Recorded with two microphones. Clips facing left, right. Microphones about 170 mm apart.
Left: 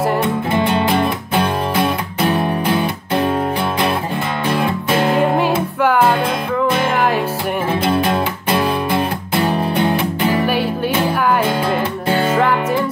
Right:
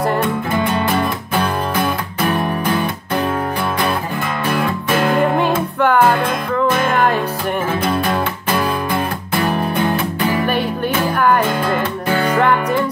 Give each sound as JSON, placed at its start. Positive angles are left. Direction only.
{"t": 0.5, "sound": "music", "side_deg": 25}
{"t": 4.5, "sound": "music", "side_deg": 30}
{"t": 5.4, "sound": "music", "side_deg": 5}
{"t": 6.1, "sound": "music", "side_deg": 25}
{"t": 6.9, "sound": "music", "side_deg": 5}
{"t": 7.7, "sound": "music", "side_deg": 25}
{"t": 11.1, "sound": "music", "side_deg": 5}
{"t": 11.4, "sound": "music", "side_deg": 30}